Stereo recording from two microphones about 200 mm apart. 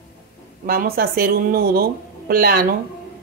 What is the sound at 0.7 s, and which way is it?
Speech, 50° right (ahead or behind).